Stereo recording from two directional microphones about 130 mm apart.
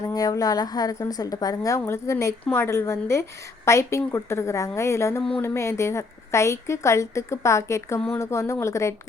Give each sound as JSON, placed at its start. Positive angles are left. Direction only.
{"t": 0.1, "sound": "a woman's voice", "side_deg": 30}